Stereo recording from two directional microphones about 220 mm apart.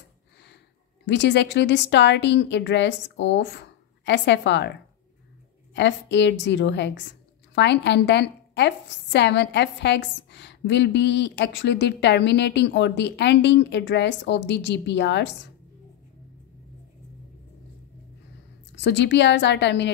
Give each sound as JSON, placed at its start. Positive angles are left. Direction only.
{"t": 1.0, "sound": "a woman's voice", "side_deg": 50}
{"t": 5.8, "sound": "a woman's voice", "side_deg": 55}
{"t": 18.8, "sound": "a woman's voice", "side_deg": 55}